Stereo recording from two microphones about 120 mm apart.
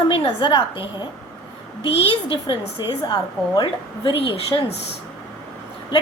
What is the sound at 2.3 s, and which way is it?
A woman's voice, 45° left (ahead or behind).